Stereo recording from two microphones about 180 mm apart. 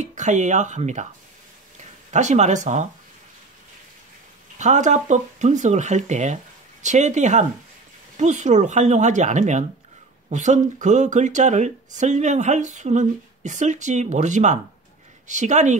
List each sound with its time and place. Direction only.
0.0 s speech: 40° right (ahead or behind)
2.0 s speech: 40° right (ahead or behind)
4.6 s speech: 40° right (ahead or behind)